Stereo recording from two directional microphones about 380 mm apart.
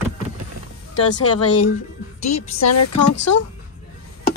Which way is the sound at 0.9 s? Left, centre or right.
Left.